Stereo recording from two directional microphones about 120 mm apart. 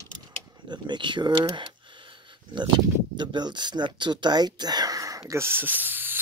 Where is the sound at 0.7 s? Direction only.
40° right (ahead or behind).